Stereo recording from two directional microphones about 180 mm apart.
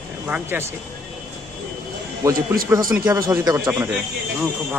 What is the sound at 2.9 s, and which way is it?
Speech, 5° right (ahead or behind).